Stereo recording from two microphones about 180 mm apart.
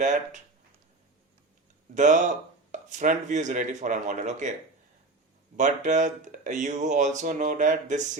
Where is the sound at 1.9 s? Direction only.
45° right (ahead or behind).